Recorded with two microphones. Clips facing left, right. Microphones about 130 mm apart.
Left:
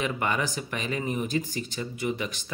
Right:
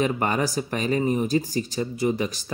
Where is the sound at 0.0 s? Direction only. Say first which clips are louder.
Right 5 dB; 40° right (ahead or behind).